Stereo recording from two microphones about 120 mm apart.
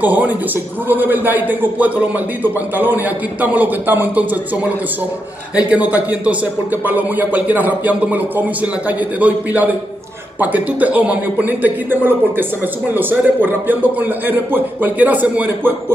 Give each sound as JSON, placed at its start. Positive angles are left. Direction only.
{"t": 0.0, "sound": "speech", "side_deg": -15}
{"t": 5.6, "sound": "speech", "side_deg": -10}